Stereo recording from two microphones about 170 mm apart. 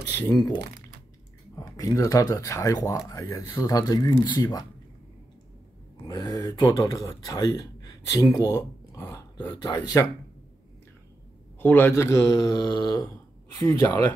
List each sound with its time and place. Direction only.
0.0 s speech: 25° left (ahead or behind)
6.0 s speech: 20° left (ahead or behind)
11.6 s speech: 10° left (ahead or behind)